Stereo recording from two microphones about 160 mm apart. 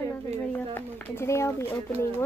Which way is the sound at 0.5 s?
10° left (ahead or behind).